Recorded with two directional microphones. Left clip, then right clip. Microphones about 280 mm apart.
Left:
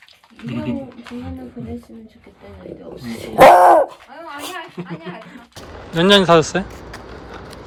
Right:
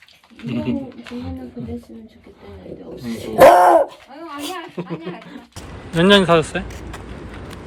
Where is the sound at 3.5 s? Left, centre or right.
Centre.